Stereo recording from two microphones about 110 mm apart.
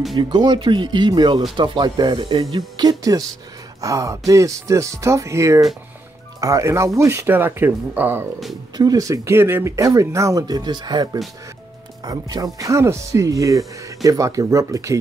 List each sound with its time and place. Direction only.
0.1 s speech: 40° right (ahead or behind); by 8.3 s 15° right (ahead or behind)
8.7 s speech: 35° right (ahead or behind)